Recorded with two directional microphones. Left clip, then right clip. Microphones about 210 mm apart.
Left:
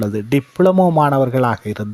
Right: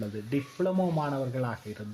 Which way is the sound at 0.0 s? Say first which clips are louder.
Left 14 dB; 45° left (ahead or behind).